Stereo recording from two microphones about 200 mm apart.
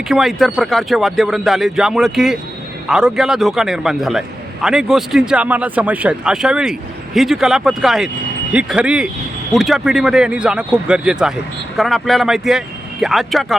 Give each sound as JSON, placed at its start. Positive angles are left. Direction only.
{"t": 0.1, "sound": "a man's voice", "side_deg": 0}